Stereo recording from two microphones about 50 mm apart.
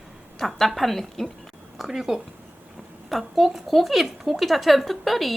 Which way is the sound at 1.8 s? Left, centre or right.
Centre.